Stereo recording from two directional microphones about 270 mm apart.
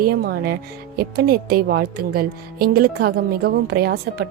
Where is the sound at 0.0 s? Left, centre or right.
Right.